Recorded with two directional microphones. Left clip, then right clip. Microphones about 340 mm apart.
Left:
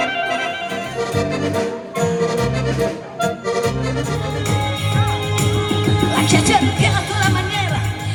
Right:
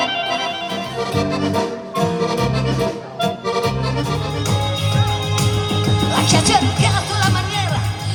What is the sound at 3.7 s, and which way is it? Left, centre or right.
Music, right.